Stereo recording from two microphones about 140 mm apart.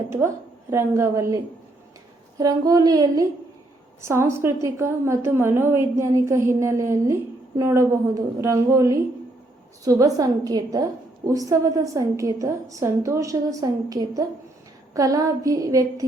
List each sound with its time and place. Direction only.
0.1 s a woman's voice: 20° right (ahead or behind)
2.4 s a woman's voice: 25° right (ahead or behind)